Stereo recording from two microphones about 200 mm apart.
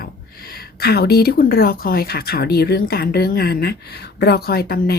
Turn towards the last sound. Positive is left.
turn(degrees=50)  # may be behind; listen again after turning